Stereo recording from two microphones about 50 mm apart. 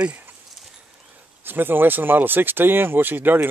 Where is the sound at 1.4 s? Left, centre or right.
Right.